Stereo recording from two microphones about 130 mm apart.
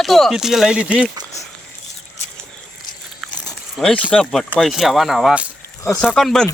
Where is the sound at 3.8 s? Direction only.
5° left (ahead or behind).